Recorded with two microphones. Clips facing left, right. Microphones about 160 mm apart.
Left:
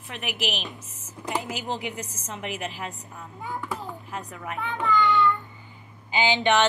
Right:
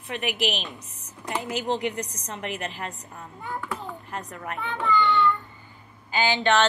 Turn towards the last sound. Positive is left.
turn(degrees=15)  # may be behind; listen again after turning